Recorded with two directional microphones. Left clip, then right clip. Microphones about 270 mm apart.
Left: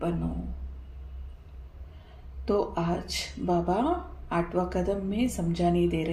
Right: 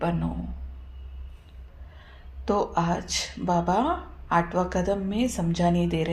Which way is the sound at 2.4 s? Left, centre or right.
Centre.